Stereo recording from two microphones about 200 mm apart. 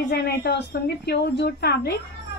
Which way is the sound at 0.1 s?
55° left (ahead or behind).